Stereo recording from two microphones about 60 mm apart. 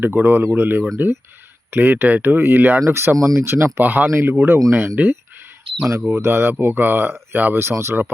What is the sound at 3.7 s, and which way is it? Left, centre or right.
Speech, right.